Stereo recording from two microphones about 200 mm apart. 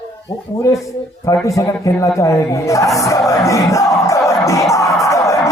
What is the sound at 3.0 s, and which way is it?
Music, 15° left (ahead or behind).